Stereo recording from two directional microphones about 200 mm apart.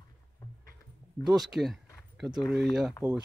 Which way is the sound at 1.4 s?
Centre (ahead or behind).